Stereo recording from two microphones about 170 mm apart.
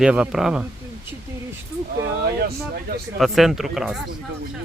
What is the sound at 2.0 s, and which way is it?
Speech, 65° right (ahead or behind).